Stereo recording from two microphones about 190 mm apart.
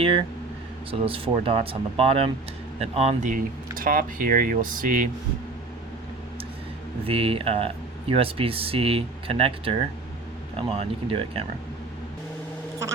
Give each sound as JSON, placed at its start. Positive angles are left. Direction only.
{"t": 0.9, "sound": "speech", "side_deg": -30}
{"t": 7.0, "sound": "speech", "side_deg": -30}